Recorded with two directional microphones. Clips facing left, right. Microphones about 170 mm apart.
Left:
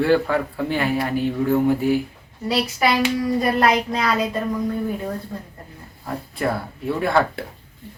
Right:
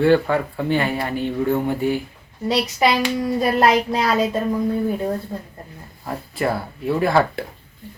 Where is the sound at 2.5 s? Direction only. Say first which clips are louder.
Right 2 dB; 20° right (ahead or behind).